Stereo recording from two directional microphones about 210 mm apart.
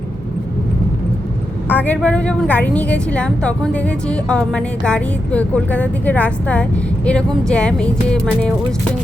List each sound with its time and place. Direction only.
1.7 s a woman's voice: 5° left (ahead or behind)